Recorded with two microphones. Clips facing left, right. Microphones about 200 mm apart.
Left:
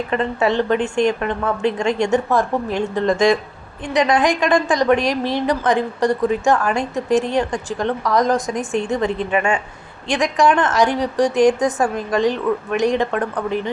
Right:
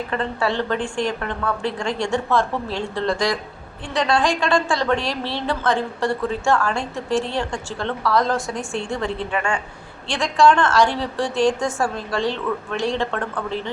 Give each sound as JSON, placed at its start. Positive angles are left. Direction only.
{"t": 0.1, "sound": "a woman's voice", "side_deg": 20}